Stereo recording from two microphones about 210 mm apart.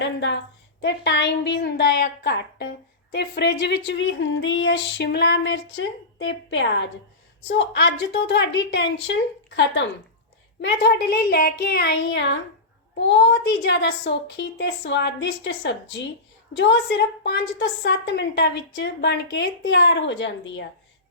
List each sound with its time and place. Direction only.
0.0 s a woman's voice: 60° left (ahead or behind)
10.6 s a woman's voice: 55° left (ahead or behind)